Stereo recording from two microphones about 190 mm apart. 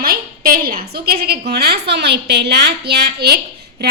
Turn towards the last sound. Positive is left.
turn(degrees=-60)  # may be behind; listen again after turning